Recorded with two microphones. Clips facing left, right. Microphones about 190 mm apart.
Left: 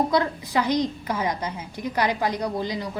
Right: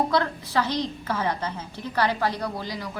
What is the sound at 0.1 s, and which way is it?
A woman's voice, 15° left (ahead or behind).